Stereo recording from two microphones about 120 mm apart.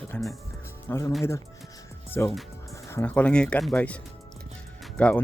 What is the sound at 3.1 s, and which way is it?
Speech, 10° left (ahead or behind).